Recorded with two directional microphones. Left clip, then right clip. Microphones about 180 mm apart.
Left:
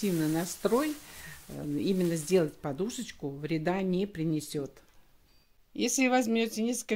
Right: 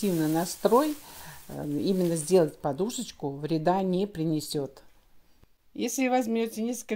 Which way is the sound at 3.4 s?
5° right (ahead or behind).